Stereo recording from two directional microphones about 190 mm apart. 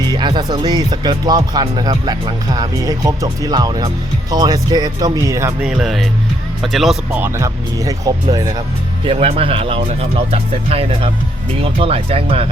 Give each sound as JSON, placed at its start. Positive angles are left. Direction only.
{"t": 0.1, "sound": "speech", "side_deg": -25}
{"t": 9.0, "sound": "speech", "side_deg": -30}